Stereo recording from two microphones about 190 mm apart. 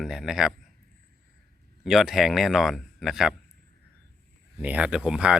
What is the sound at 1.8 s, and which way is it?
Speech, centre (ahead or behind).